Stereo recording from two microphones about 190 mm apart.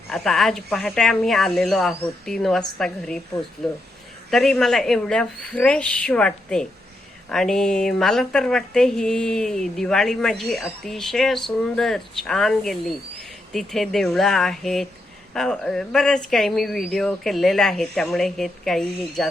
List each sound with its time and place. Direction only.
0.1 s speech: centre (ahead or behind)